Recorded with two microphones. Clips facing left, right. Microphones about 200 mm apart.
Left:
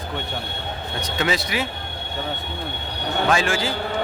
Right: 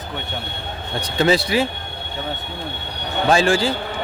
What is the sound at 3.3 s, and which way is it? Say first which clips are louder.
Speech: right 7 dB; 30° right (ahead or behind).